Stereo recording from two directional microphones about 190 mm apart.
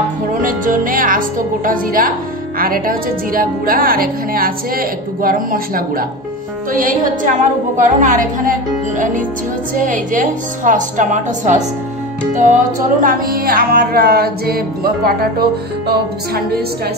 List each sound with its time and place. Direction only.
0.3 s a woman's voice: 45° right (ahead or behind)